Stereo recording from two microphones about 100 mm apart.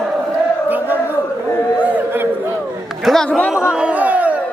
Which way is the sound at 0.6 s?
15° right (ahead or behind).